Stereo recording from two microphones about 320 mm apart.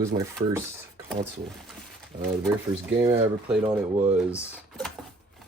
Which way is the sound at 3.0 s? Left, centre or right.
Centre.